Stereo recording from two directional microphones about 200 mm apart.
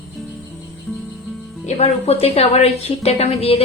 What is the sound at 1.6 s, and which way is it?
A woman's voice, 30° left (ahead or behind).